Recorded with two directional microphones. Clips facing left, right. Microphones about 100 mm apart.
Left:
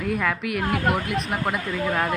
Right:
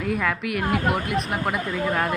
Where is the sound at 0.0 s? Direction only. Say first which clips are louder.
Even; centre (ahead or behind).